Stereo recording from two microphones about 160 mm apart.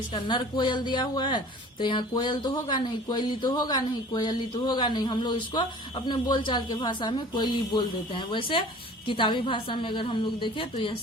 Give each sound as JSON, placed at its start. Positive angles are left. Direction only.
{"t": 0.1, "sound": "a woman's voice", "side_deg": 30}